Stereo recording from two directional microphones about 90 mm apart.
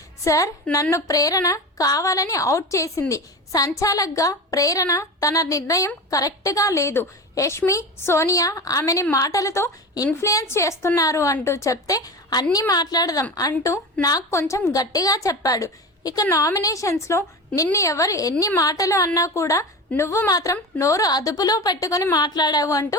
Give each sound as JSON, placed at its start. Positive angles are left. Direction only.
{"t": 0.3, "sound": "a woman's voice", "side_deg": 35}
{"t": 21.1, "sound": "a woman's voice", "side_deg": 45}